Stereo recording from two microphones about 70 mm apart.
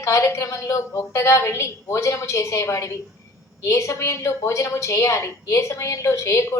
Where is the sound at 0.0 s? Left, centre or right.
Left.